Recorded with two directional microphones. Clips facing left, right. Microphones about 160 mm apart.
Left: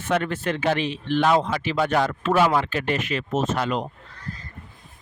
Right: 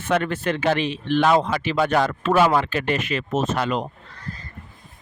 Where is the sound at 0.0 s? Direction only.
65° right (ahead or behind).